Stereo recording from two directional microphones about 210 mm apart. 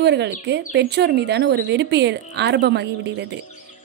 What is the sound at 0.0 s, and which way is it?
Speech, 55° right (ahead or behind).